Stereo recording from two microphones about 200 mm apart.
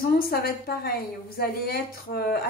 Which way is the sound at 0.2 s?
50° left (ahead or behind).